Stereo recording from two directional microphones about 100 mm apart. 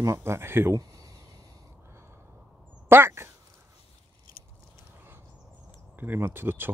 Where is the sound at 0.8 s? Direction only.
35° right (ahead or behind).